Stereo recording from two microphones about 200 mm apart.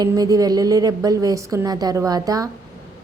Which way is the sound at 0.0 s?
20° right (ahead or behind).